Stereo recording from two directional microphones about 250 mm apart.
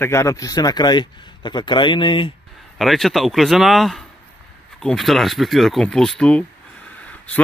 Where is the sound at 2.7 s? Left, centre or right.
Centre.